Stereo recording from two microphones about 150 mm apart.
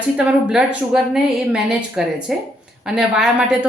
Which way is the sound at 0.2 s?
5° right (ahead or behind).